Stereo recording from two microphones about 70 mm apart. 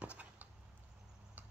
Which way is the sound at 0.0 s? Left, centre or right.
Right.